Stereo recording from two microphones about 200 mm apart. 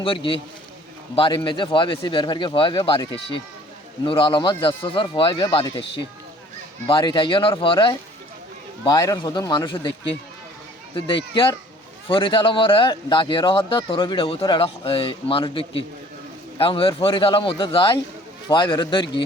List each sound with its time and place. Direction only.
0.0 s speech: 25° left (ahead or behind)
6.8 s speech: 25° left (ahead or behind)
10.9 s speech: 25° left (ahead or behind)